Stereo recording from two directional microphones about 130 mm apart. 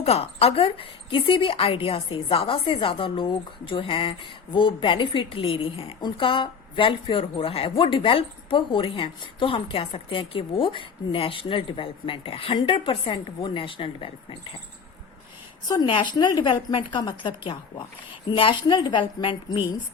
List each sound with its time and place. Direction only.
0.0 s a woman's voice: 50° left (ahead or behind)
15.6 s a woman's voice: 30° left (ahead or behind)